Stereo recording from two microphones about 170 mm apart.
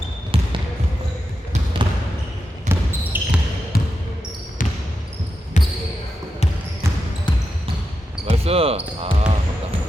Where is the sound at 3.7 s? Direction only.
60° left (ahead or behind); by 5.7 s 45° left (ahead or behind).